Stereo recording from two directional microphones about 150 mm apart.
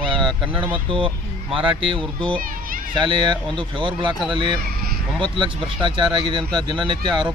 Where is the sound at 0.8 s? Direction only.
35° right (ahead or behind).